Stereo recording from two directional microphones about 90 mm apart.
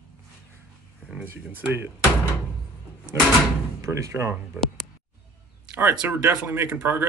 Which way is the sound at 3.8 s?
35° right (ahead or behind).